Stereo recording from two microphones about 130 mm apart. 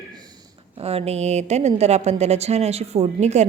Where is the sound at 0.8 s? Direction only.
50° right (ahead or behind).